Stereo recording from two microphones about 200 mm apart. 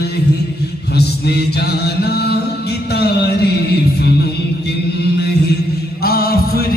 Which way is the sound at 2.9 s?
55° left (ahead or behind).